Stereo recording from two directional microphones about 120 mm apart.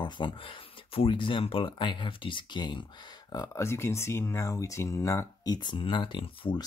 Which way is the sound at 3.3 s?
25° left (ahead or behind).